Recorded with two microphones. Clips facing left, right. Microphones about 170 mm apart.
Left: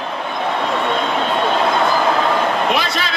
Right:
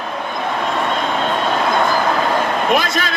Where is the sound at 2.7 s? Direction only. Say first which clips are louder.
Right 3 dB; 50° right (ahead or behind).